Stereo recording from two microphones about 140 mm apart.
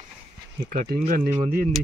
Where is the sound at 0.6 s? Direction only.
80° right.